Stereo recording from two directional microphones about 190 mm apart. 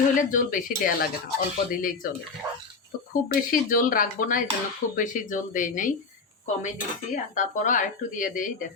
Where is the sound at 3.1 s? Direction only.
45° left (ahead or behind).